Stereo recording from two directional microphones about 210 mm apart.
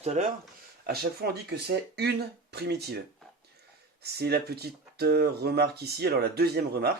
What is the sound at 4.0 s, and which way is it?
Speech, 50° right (ahead or behind).